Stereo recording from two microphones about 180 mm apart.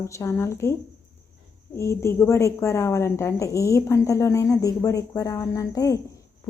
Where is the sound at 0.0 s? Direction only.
15° left (ahead or behind).